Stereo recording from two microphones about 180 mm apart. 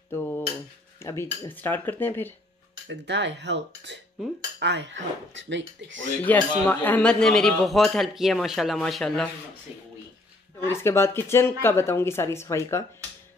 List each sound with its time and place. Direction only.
0.1 s dishes: 10° left (ahead or behind)
0.9 s speech: 15° left (ahead or behind)
2.9 s speech: 75° right (ahead or behind)
6.2 s a man's voice: 10° left (ahead or behind)
10.7 s speech: 15° left (ahead or behind)